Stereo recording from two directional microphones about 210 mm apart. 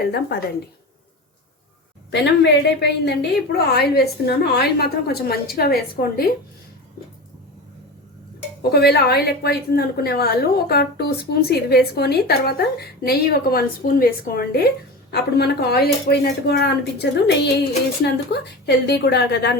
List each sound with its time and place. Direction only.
0.0 s a woman's voice: 50° left (ahead or behind)
2.0 s a woman's voice: 55° left (ahead or behind)
8.7 s a woman's voice: 50° left (ahead or behind)